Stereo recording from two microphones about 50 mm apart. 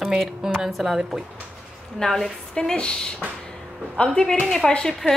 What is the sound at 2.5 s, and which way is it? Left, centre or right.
A woman's voice, centre.